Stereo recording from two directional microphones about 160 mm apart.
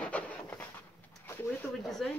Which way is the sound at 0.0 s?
10° left (ahead or behind).